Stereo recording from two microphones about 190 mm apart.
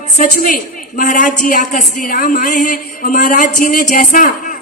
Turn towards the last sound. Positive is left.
turn(degrees=45)  # may be behind; listen again after turning